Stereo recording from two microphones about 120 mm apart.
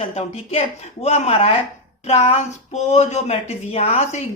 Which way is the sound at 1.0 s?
65° left (ahead or behind).